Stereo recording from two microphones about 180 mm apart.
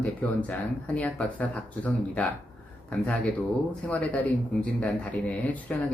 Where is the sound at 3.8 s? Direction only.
5° left (ahead or behind).